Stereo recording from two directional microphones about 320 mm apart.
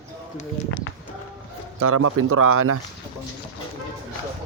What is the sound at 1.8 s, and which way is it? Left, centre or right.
Speech, right.